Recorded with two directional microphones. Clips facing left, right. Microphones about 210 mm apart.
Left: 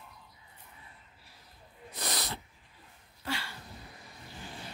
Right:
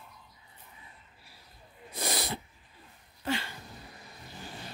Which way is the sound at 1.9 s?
10° right (ahead or behind).